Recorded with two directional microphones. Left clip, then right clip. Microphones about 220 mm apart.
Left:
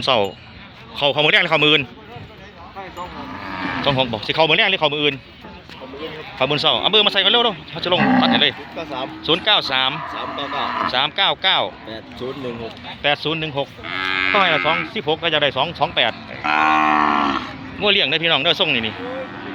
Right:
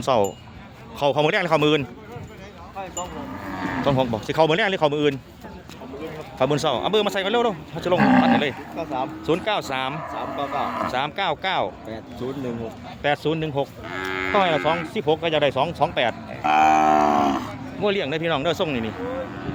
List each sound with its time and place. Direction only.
0.0 s speech: 10° right (ahead or behind)
3.4 s a sound: 35° right (ahead or behind)
3.8 s cattle: 15° right (ahead or behind)
6.4 s speech: 15° right (ahead or behind)
7.9 s speech: 20° left (ahead or behind)
9.2 s speech: 10° right (ahead or behind)
9.9 s speech: 45° right (ahead or behind)
10.9 s speech: 10° right (ahead or behind)
13.0 s cattle: 15° right (ahead or behind)
14.3 s speech: 15° right (ahead or behind)
16.4 s livestock: 55° right (ahead or behind)
17.7 s speech: 10° right (ahead or behind)